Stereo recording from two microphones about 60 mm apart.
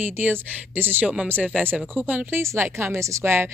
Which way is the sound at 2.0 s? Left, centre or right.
Right.